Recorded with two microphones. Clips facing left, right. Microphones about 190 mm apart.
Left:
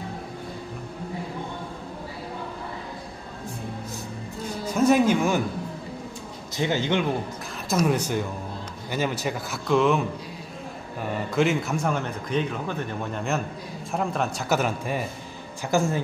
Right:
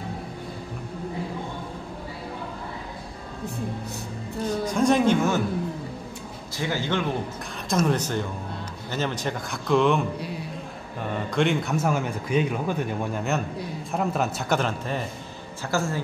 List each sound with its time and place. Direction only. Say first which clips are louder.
4.6 s speech: left 2 dB; 5° left (ahead or behind)
6.5 s a man's voice: left 3 dB; 20° left (ahead or behind); by 14.6 s centre (ahead or behind)
14.6 s speech: left 1 dB; 10° left (ahead or behind)